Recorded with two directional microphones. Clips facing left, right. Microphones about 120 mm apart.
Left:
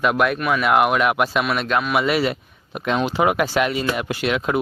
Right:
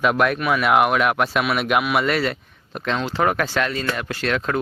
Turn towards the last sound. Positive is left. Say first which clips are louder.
# left 2 dB
turn(degrees=10)  # may be behind; listen again after turning